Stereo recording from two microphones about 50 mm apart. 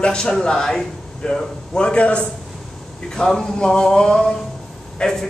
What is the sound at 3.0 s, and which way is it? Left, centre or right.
Speech, centre.